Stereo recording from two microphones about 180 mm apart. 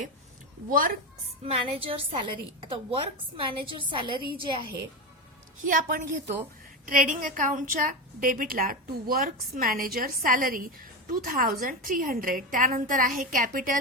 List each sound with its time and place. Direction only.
1.5 s a woman's voice: 30° right (ahead or behind)
5.6 s a woman's voice: 50° right (ahead or behind)